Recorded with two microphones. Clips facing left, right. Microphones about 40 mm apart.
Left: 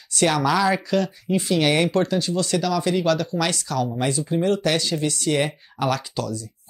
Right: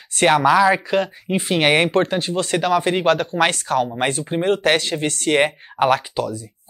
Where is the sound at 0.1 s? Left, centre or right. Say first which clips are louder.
Right 5 dB; right.